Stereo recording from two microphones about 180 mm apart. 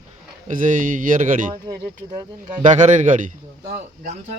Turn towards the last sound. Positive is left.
turn(degrees=-45)  # may be behind; listen again after turning